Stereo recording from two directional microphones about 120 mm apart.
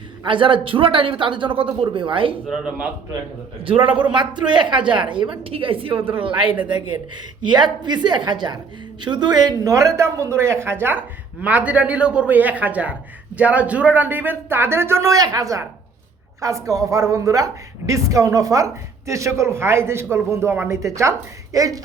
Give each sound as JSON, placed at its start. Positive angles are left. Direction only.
{"t": 0.3, "sound": "speech", "side_deg": -45}
{"t": 2.5, "sound": "speech", "side_deg": -10}
{"t": 3.6, "sound": "a woman's voice", "side_deg": -50}